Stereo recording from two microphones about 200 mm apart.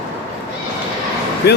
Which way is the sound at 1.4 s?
55° left (ahead or behind).